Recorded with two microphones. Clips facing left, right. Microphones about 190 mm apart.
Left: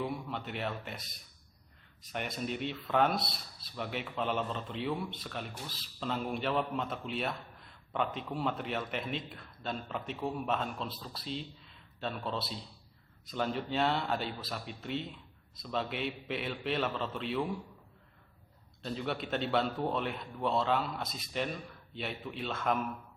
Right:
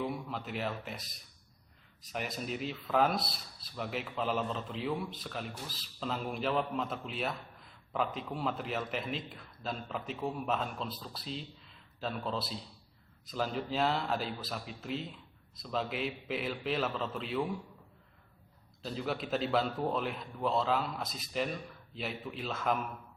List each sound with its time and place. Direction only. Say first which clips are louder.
0.0 s speech: even; centre (ahead or behind)
18.8 s speech: even; centre (ahead or behind)